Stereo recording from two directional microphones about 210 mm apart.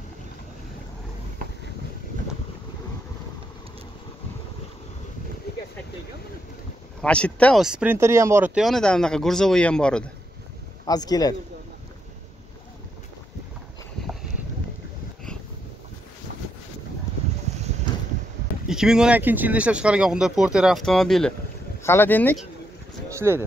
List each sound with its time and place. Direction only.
7.0 s speech: 5° left (ahead or behind)
10.9 s speech: 20° left (ahead or behind)
18.7 s speech: 5° right (ahead or behind)
23.1 s speech: 10° right (ahead or behind)